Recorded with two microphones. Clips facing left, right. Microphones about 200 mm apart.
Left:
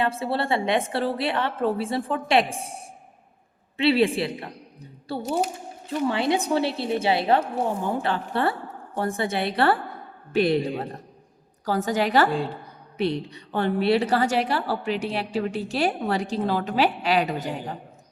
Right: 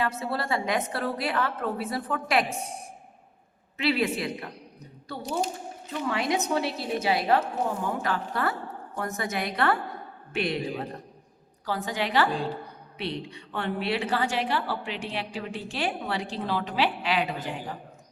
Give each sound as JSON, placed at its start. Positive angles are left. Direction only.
{"t": 0.0, "sound": "a woman's voice", "side_deg": 30}
{"t": 3.8, "sound": "a woman's voice", "side_deg": 30}
{"t": 5.2, "sound": "speech", "side_deg": 0}
{"t": 6.1, "sound": "a woman's voice", "side_deg": 30}